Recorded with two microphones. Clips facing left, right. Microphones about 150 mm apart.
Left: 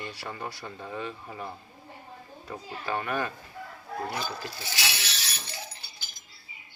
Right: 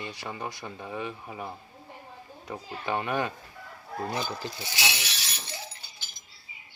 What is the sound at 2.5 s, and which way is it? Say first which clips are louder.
Speech: right 1 dB; 20° right (ahead or behind).